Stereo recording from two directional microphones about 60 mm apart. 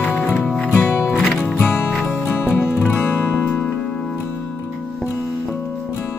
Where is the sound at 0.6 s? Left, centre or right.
Centre.